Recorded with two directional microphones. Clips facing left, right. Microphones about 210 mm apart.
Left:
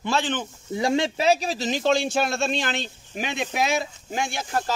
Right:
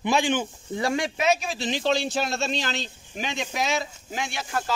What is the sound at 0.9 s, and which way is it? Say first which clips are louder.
A man's voice: left 3 dB; 30° left (ahead or behind).